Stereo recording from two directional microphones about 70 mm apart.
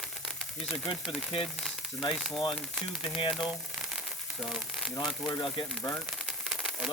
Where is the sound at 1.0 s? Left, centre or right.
Centre.